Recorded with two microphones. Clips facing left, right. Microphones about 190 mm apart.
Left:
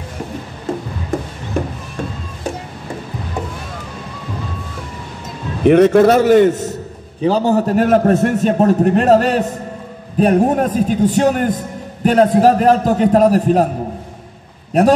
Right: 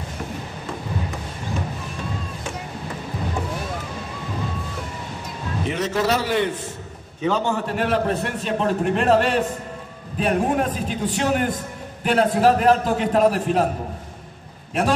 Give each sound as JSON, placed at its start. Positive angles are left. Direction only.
{"t": 1.6, "sound": "a sound", "side_deg": 60}
{"t": 5.6, "sound": "a man's voice", "side_deg": 60}
{"t": 14.7, "sound": "a man's voice", "side_deg": 40}